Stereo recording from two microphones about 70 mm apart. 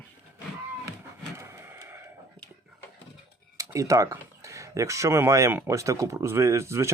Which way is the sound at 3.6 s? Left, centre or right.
Right.